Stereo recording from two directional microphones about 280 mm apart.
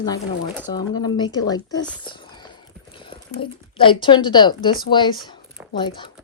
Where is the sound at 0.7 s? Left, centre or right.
Centre.